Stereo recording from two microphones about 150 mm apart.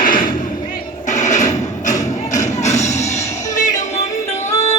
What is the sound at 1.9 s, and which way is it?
Music, 20° left (ahead or behind).